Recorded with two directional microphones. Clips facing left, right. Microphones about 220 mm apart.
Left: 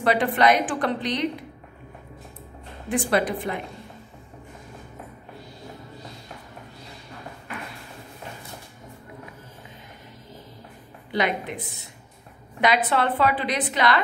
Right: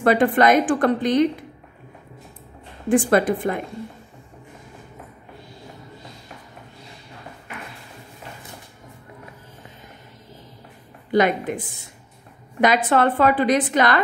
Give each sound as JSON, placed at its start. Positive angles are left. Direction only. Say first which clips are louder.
{"t": 0.0, "sound": "a woman's voice", "louder": "right 4 dB", "side_deg": -50}
{"t": 2.9, "sound": "a woman's voice", "louder": "right 6 dB", "side_deg": -50}
{"t": 11.1, "sound": "a woman's voice", "louder": "right 7 dB", "side_deg": -45}